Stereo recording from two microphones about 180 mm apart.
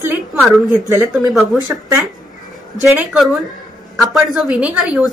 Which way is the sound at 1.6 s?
15° right (ahead or behind).